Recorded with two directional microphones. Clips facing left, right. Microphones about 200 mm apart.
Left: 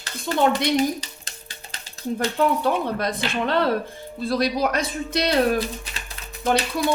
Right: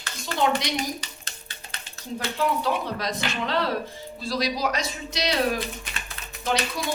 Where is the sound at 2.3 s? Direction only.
55° left (ahead or behind).